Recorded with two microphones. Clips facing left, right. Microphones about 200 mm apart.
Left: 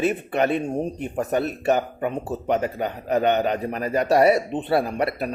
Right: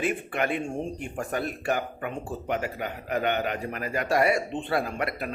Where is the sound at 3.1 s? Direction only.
35° left (ahead or behind).